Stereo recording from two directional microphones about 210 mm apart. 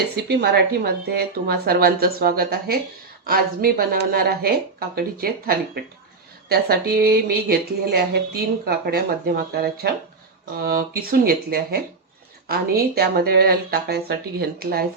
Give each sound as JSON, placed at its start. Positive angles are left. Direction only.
{"t": 0.3, "sound": "speech", "side_deg": -50}